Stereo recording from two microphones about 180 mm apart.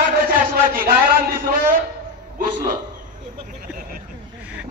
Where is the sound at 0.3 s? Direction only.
50° right (ahead or behind).